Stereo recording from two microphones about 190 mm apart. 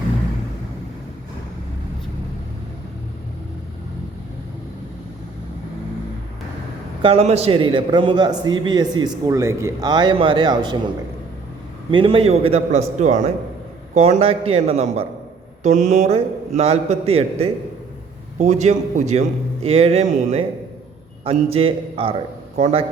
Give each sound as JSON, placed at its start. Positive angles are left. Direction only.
{"t": 7.0, "sound": "a man's voice", "side_deg": -30}
{"t": 11.9, "sound": "a man's voice", "side_deg": -25}